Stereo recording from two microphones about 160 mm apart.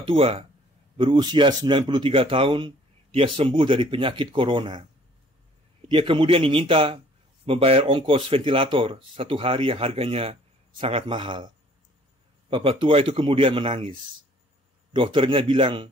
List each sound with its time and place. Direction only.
0.0 s speech: 35° right (ahead or behind)
5.9 s speech: 35° right (ahead or behind)